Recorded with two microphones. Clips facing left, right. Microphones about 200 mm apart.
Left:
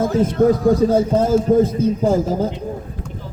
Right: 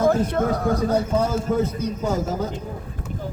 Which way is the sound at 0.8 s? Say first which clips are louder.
Left 5 dB; 35° left (ahead or behind).